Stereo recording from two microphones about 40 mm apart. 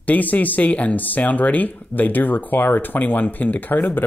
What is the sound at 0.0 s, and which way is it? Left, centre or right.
Speech, left.